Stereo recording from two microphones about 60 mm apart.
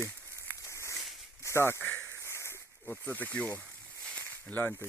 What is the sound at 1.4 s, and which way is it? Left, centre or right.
Speech, left.